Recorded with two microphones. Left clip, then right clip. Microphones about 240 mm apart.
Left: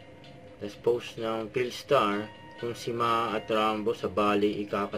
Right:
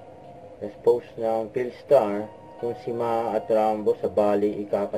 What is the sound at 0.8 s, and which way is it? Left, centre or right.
Speech, left.